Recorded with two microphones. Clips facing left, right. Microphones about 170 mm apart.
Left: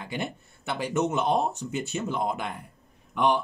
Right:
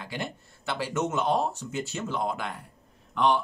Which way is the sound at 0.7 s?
20° left (ahead or behind).